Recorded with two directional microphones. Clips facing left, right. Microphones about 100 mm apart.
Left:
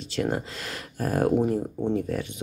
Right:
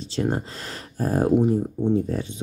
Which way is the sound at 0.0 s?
30° right (ahead or behind).